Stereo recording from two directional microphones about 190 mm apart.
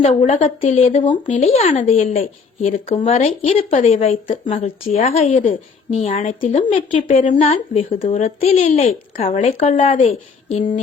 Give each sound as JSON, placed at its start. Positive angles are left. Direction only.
{"t": 0.0, "sound": "speech", "side_deg": 40}
{"t": 3.0, "sound": "speech", "side_deg": 35}
{"t": 8.6, "sound": "speech", "side_deg": 45}